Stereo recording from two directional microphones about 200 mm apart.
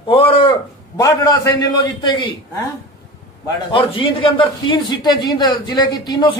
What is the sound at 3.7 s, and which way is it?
A man's voice, 25° left (ahead or behind).